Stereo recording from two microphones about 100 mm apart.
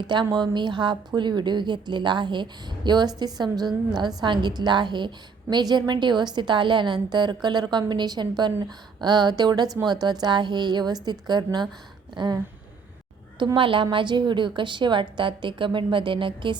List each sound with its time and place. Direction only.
0.1 s a woman's voice: 50° right (ahead or behind)
13.4 s a woman's voice: 55° right (ahead or behind)